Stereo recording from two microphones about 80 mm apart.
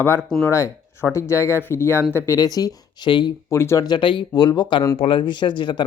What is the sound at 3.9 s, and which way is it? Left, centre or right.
Speech, left.